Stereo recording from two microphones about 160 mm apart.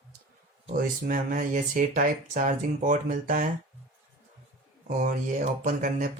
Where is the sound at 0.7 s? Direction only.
60° right (ahead or behind).